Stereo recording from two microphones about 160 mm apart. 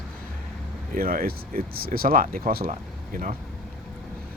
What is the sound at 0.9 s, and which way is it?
Speech, 65° right (ahead or behind).